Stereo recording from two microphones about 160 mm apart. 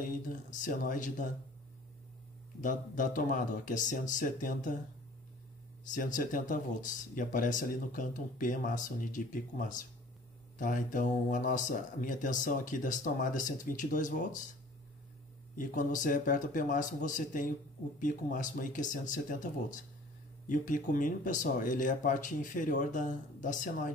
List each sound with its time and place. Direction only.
0.0 s speech: 55° left (ahead or behind)
2.6 s speech: 55° left (ahead or behind)
5.9 s speech: 55° left (ahead or behind)
15.5 s speech: 55° left (ahead or behind)